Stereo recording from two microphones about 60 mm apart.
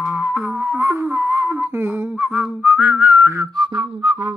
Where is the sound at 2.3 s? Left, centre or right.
Centre.